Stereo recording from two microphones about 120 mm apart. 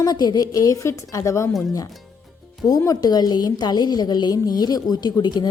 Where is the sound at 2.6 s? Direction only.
30° left (ahead or behind).